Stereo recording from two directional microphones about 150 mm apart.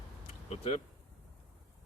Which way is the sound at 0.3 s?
45° left (ahead or behind).